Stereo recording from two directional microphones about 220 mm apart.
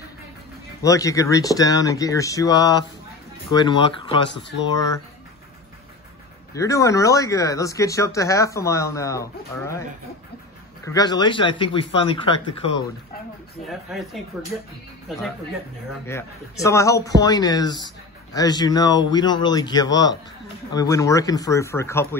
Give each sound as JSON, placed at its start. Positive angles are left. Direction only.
{"t": 0.8, "sound": "speech", "side_deg": 15}
{"t": 4.3, "sound": "speech", "side_deg": 50}
{"t": 6.5, "sound": "speech", "side_deg": 15}
{"t": 10.9, "sound": "speech", "side_deg": 20}
{"t": 13.7, "sound": "speech", "side_deg": 0}
{"t": 16.1, "sound": "speech", "side_deg": 15}